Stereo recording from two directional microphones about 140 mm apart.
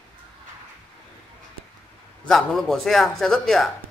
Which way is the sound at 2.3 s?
Centre (ahead or behind).